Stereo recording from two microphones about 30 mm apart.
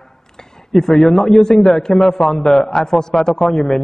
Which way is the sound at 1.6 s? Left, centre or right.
Centre.